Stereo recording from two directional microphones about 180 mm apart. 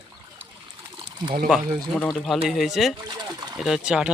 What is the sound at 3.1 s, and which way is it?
Speech, 25° right (ahead or behind).